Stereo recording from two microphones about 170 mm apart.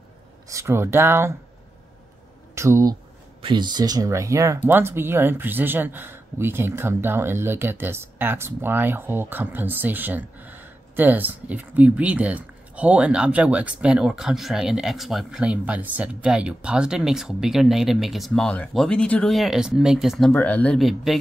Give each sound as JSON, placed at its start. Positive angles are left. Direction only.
{"t": 0.5, "sound": "speech", "side_deg": -15}
{"t": 2.5, "sound": "speech", "side_deg": -15}